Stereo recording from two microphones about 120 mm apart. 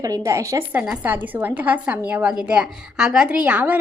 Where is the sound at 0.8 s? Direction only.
15° right (ahead or behind).